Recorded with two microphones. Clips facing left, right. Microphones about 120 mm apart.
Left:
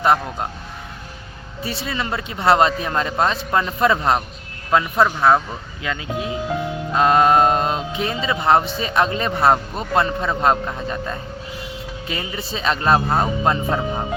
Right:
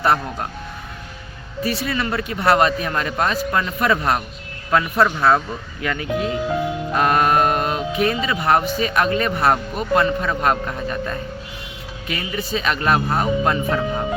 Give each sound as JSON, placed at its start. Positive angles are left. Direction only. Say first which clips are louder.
{"t": 0.0, "sound": "speech", "louder": "left 1 dB", "side_deg": 20}
{"t": 1.6, "sound": "speech", "louder": "right 3 dB", "side_deg": 25}